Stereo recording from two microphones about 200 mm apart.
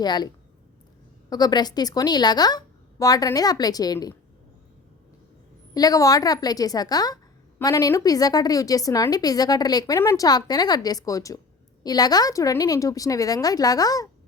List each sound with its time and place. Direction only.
0.0 s a woman's voice: 20° left (ahead or behind)
1.3 s a woman's voice: 20° left (ahead or behind)
5.7 s a woman's voice: 20° left (ahead or behind)